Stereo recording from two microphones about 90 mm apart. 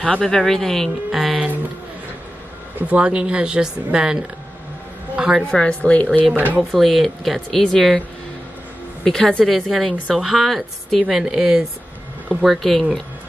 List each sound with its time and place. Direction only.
0.0 s speech: 5° left (ahead or behind)
2.9 s speech: 10° right (ahead or behind)
5.1 s a sound: 5° right (ahead or behind)
5.4 s a woman's voice: 10° left (ahead or behind)
6.3 s speech: 20° right (ahead or behind)
6.7 s a woman's voice: centre (ahead or behind)
9.0 s a woman's voice: 5° left (ahead or behind)